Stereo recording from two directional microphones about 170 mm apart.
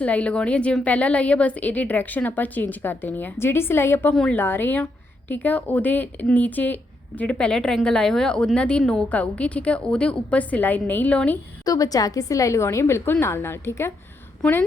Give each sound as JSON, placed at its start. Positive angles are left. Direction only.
{"t": 0.0, "sound": "a woman's voice", "side_deg": 5}
{"t": 11.6, "sound": "a woman's voice", "side_deg": 20}